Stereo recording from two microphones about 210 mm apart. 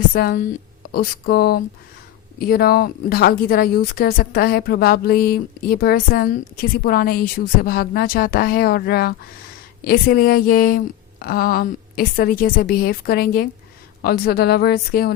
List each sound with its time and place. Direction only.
0.1 s a woman's voice: 45° left (ahead or behind)